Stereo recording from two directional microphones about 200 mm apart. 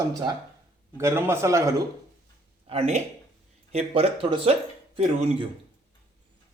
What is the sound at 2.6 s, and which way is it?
Speech, 30° right (ahead or behind).